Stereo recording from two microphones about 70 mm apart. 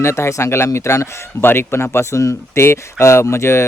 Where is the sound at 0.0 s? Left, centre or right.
Left.